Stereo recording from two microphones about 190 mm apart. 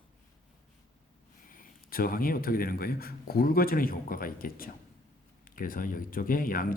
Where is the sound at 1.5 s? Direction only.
50° left (ahead or behind).